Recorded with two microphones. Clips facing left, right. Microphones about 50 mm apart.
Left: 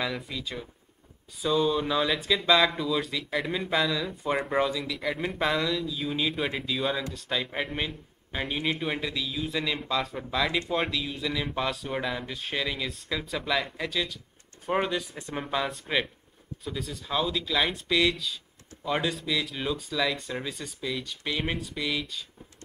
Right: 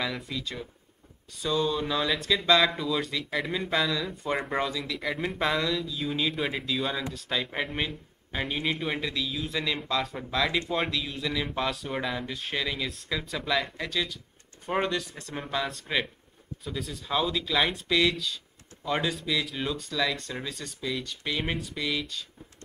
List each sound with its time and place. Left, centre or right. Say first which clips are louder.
0.0 s speech: even; centre